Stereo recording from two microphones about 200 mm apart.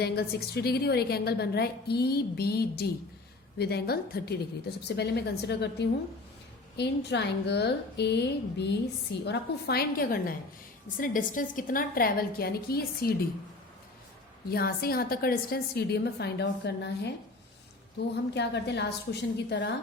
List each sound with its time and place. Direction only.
0.0 s a woman's voice: 55° left (ahead or behind)
14.5 s a woman's voice: 50° left (ahead or behind)
18.3 s a woman's voice: 60° left (ahead or behind)